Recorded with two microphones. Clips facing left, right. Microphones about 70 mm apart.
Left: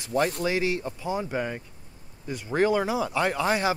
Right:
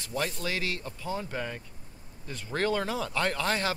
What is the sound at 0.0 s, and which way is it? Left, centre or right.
Speech, left.